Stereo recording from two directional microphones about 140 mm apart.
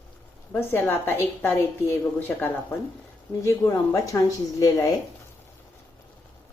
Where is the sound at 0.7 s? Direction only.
15° left (ahead or behind).